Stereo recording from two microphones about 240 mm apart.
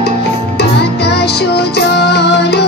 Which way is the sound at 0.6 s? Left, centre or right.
Left.